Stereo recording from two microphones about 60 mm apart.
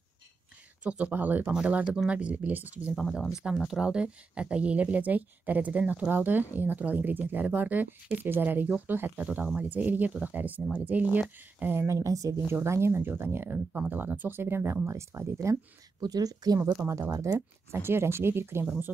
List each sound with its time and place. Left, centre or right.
0.8 s speech: right
3.0 s speech: centre; by 9.2 s right
9.2 s speech: right
11.7 s a woman's voice: right
12.6 s speech: right
13.7 s speech: right
16.1 s speech: right
17.1 s a woman's voice: right
17.7 s speech: right